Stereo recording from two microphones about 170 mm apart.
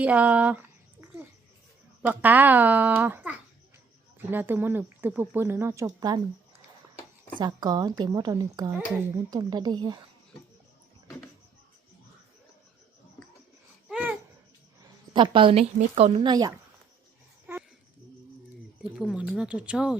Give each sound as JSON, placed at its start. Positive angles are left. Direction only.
{"t": 0.0, "sound": "speech", "side_deg": -10}
{"t": 2.0, "sound": "speech", "side_deg": -10}
{"t": 7.3, "sound": "a woman's voice", "side_deg": -25}
{"t": 13.8, "sound": "babbling", "side_deg": -5}
{"t": 15.1, "sound": "a woman's voice", "side_deg": -30}
{"t": 16.3, "sound": "a woman's voice", "side_deg": -20}
{"t": 17.5, "sound": "a sound", "side_deg": -15}
{"t": 18.8, "sound": "speech", "side_deg": -5}